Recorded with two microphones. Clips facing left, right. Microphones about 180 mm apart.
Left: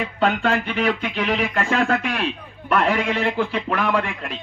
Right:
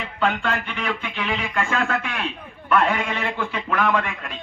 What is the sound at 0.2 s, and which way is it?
Speech, 40° left (ahead or behind).